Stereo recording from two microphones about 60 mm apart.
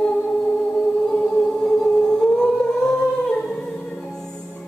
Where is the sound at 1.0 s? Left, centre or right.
Centre.